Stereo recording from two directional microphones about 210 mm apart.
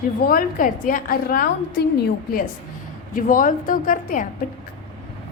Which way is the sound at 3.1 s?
40° left (ahead or behind).